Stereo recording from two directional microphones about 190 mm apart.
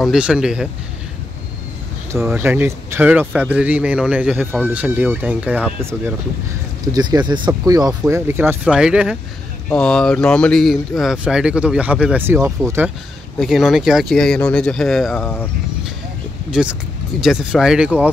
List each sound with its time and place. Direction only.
0.0 s speech: 5° right (ahead or behind)
2.2 s speech: 10° right (ahead or behind)
13.4 s speech: centre (ahead or behind)
16.4 s speech: 5° right (ahead or behind)